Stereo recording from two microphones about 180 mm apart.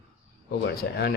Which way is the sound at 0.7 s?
60° left (ahead or behind).